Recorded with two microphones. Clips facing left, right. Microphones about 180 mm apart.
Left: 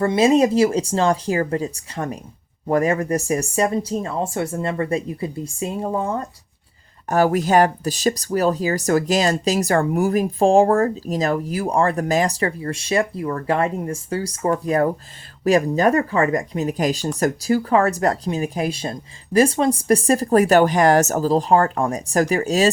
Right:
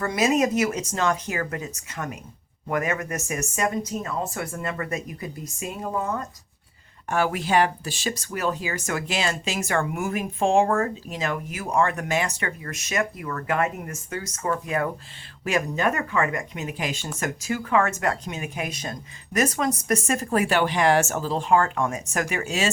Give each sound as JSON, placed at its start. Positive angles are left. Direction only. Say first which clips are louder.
{"t": 0.0, "sound": "speech", "louder": "left 6 dB", "side_deg": 30}
{"t": 7.1, "sound": "speech", "louder": "left 6 dB", "side_deg": 40}